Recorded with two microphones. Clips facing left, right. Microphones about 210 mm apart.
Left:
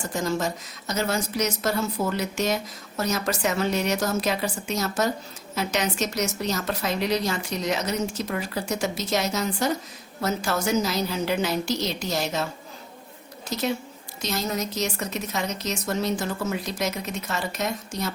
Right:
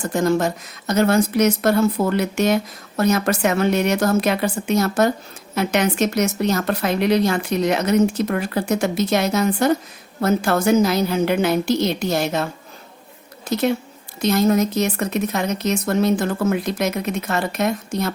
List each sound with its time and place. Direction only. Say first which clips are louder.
0.1 s a woman's voice: right 8 dB; 60° right (ahead or behind)
13.5 s a woman's voice: right 7 dB; 60° right (ahead or behind)